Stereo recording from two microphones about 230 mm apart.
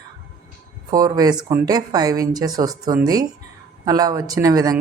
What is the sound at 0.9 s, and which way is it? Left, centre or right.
Speech, centre.